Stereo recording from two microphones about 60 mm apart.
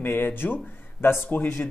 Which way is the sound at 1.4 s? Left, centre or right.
Left.